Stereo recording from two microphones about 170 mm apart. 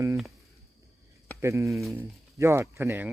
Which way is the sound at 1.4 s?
15° right (ahead or behind).